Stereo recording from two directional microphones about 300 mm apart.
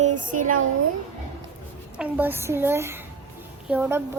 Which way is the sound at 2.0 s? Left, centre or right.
Centre.